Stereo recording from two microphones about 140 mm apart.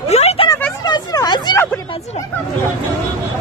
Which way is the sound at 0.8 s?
30° left (ahead or behind).